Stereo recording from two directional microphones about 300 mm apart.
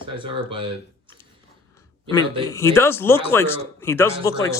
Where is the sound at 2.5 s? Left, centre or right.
Centre.